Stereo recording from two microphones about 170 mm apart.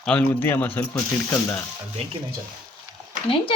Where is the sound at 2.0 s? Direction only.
35° right (ahead or behind).